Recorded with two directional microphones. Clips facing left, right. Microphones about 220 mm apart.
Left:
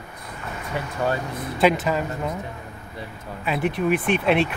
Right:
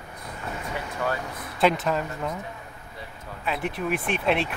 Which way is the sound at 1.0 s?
35° left (ahead or behind).